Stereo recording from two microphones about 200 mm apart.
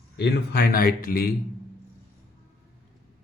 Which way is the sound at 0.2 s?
55° left (ahead or behind).